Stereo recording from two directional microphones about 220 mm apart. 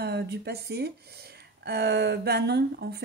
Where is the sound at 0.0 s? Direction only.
45° right (ahead or behind).